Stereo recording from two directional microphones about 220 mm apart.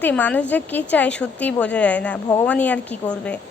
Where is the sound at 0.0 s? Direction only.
5° left (ahead or behind).